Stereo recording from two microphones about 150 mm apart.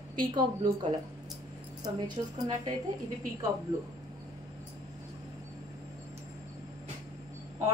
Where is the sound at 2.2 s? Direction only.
40° right (ahead or behind).